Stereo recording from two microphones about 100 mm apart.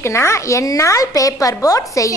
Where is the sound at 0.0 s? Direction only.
30° left (ahead or behind).